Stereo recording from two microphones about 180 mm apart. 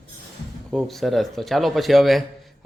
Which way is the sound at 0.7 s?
Centre (ahead or behind).